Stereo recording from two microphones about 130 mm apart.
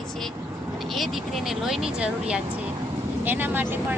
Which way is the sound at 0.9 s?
Centre (ahead or behind).